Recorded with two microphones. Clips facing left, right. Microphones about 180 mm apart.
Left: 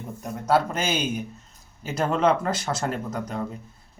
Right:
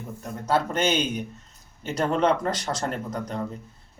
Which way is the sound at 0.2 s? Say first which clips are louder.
Left 3 dB; 10° left (ahead or behind).